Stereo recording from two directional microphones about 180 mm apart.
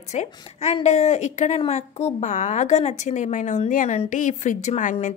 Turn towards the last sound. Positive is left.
turn(degrees=45)  # may be behind; listen again after turning